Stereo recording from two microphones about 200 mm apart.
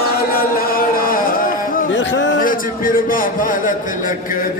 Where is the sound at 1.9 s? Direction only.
65° left (ahead or behind).